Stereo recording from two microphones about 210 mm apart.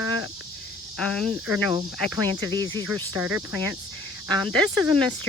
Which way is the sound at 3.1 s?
10° right (ahead or behind).